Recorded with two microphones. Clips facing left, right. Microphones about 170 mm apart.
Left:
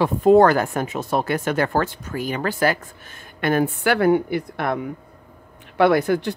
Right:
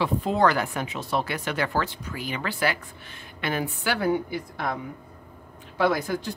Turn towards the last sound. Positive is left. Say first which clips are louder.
# left 8 dB
turn(degrees=65)  # may be behind; listen again after turning